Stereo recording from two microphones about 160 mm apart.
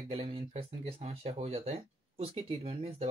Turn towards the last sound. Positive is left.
turn(degrees=-35)  # may be behind; listen again after turning